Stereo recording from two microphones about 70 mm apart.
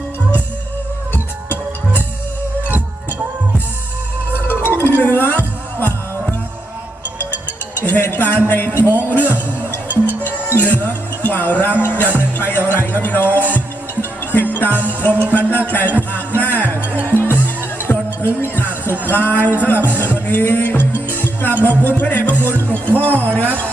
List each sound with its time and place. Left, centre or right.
1.1 s music: left
4.3 s music: left
7.8 s a sound: left
9.0 s music: left